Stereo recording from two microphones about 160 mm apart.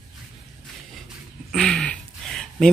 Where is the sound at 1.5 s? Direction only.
Centre (ahead or behind).